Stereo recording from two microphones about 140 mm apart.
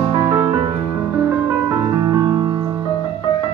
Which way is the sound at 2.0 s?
25° right (ahead or behind).